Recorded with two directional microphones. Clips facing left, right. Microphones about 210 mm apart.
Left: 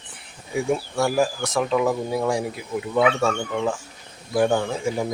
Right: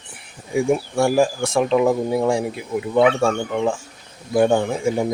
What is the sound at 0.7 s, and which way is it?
Speech, 25° right (ahead or behind).